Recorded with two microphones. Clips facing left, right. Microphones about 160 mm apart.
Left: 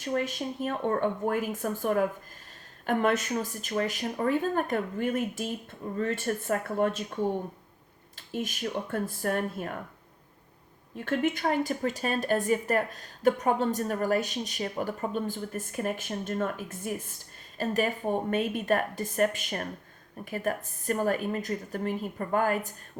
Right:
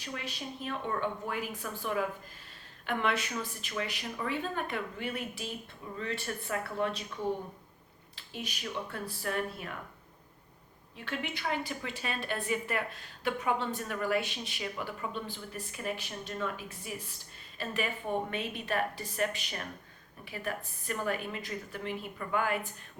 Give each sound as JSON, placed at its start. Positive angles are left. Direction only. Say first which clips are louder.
{"t": 0.0, "sound": "a woman's voice", "louder": "left 10 dB", "side_deg": 45}
{"t": 10.9, "sound": "a woman's voice", "louder": "left 10 dB", "side_deg": 45}